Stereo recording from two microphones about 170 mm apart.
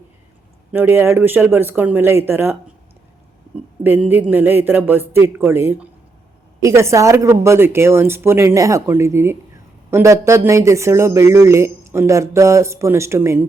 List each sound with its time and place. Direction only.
0.7 s speech: 15° right (ahead or behind)
3.8 s speech: 10° right (ahead or behind)